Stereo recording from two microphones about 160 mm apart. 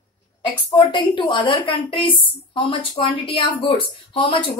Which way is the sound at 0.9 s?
30° left (ahead or behind).